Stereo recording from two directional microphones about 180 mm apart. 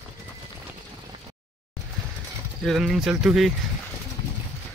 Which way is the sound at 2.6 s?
Centre (ahead or behind).